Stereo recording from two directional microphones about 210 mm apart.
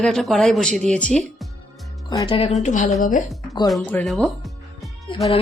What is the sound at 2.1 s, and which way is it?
Speech, 25° left (ahead or behind).